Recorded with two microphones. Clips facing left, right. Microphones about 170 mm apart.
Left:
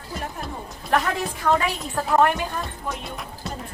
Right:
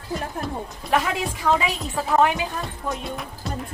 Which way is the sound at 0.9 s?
5° right (ahead or behind).